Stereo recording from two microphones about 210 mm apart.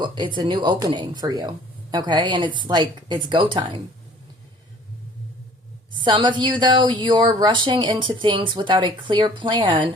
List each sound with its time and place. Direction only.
0.0 s speech: 20° right (ahead or behind)
5.9 s speech: 20° right (ahead or behind)